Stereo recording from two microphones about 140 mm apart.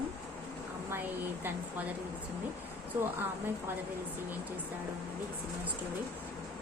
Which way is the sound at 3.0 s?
15° right (ahead or behind).